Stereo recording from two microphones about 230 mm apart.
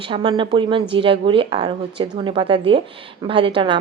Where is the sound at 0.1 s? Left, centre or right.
Right.